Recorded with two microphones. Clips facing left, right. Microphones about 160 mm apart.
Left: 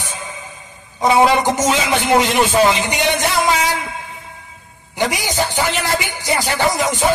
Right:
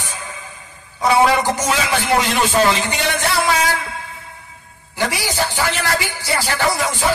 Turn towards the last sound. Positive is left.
turn(degrees=20)  # may be behind; listen again after turning